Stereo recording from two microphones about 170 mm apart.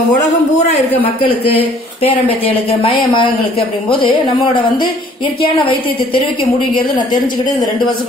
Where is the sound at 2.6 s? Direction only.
35° left (ahead or behind).